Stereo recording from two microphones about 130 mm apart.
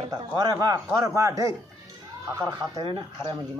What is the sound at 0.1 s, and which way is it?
A man's voice, 35° right (ahead or behind).